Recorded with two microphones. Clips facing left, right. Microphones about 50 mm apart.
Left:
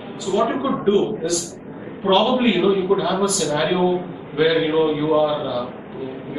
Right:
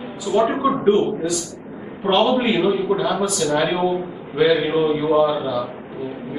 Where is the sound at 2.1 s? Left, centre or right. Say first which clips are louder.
Even; centre.